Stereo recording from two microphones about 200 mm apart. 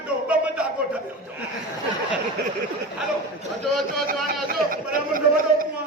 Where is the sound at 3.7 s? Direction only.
Centre (ahead or behind).